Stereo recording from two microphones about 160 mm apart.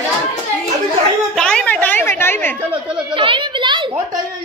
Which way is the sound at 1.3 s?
5° left (ahead or behind).